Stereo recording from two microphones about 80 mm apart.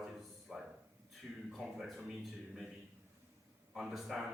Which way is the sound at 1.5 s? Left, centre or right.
Centre.